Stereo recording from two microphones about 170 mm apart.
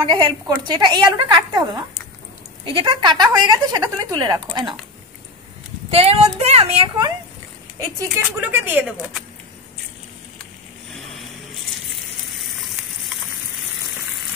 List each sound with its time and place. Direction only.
0.0 s a woman's voice: 25° right (ahead or behind)
2.6 s a woman's voice: 30° right (ahead or behind)
5.9 s speech: 35° right (ahead or behind)
8.0 s speech: 10° right (ahead or behind)